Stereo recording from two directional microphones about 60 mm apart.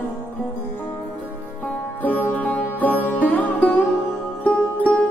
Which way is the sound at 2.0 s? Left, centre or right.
Left.